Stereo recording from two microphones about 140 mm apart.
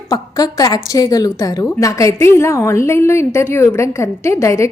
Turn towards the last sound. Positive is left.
turn(degrees=20)  # may be behind; listen again after turning